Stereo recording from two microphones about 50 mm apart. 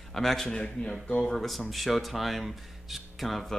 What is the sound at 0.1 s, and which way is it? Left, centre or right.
Speech, centre.